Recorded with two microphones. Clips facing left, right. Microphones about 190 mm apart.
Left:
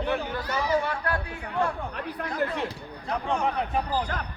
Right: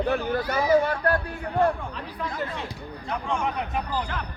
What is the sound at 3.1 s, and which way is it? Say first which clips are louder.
Speech: left 1 dB; 35° left (ahead or behind).